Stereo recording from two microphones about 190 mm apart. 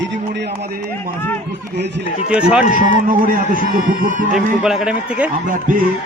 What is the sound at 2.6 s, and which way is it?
Speech, 45° left (ahead or behind).